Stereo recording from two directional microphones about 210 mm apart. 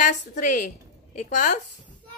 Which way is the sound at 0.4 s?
40° left (ahead or behind).